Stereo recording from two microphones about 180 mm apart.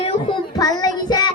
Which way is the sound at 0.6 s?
20° left (ahead or behind).